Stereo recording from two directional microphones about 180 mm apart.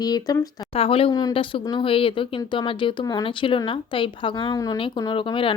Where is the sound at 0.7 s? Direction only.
30° left (ahead or behind).